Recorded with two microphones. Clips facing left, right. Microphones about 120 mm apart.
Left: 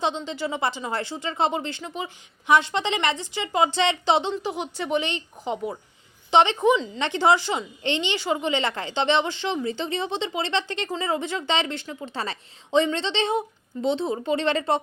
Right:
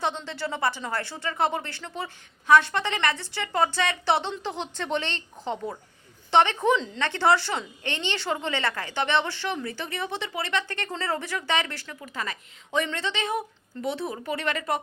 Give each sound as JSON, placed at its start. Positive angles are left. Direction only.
{"t": 0.0, "sound": "a woman's voice", "side_deg": 15}
{"t": 6.7, "sound": "a woman's voice", "side_deg": 5}
{"t": 7.0, "sound": "a woman's voice", "side_deg": 15}
{"t": 10.8, "sound": "a woman's voice", "side_deg": 10}